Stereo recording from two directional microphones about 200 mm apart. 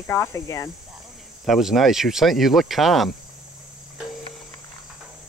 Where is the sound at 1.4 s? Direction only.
Centre (ahead or behind).